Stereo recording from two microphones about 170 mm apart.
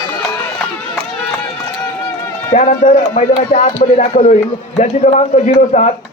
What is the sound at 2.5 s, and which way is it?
Speech, 45° left (ahead or behind).